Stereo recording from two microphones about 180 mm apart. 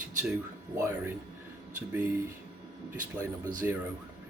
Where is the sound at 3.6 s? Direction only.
10° right (ahead or behind).